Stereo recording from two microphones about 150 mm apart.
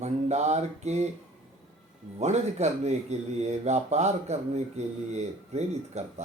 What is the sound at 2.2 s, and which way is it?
Speech, 50° right (ahead or behind).